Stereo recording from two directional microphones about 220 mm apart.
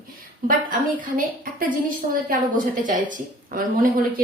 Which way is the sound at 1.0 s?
40° right (ahead or behind).